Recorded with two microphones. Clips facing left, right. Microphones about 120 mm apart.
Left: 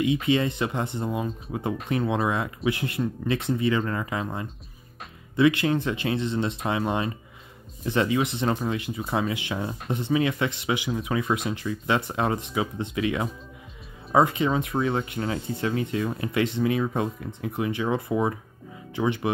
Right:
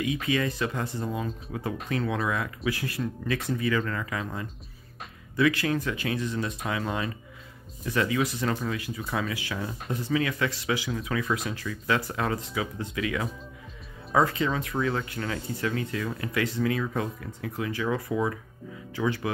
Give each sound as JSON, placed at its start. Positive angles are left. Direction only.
{"t": 0.0, "sound": "speech", "side_deg": 25}